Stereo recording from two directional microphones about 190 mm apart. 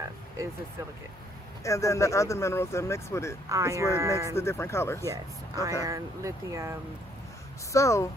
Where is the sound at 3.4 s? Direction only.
15° right (ahead or behind).